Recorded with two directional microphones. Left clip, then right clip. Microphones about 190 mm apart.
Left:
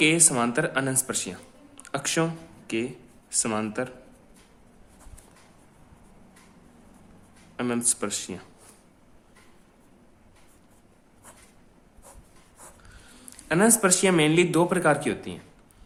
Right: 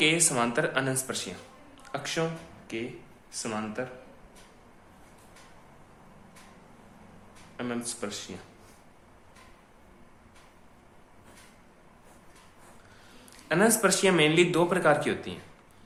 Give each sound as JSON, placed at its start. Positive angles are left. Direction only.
{"t": 0.0, "sound": "speech", "side_deg": 35}
{"t": 7.5, "sound": "speech", "side_deg": 50}
{"t": 13.1, "sound": "a man's voice", "side_deg": 40}